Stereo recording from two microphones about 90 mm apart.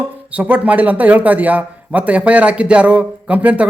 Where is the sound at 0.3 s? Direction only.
15° right (ahead or behind).